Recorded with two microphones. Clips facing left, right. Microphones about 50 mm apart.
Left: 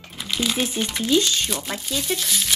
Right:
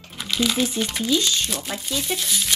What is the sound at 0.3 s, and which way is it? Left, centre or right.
Speech, centre.